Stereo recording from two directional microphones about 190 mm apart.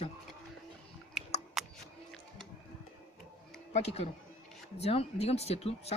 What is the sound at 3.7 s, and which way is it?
Speech, 35° left (ahead or behind).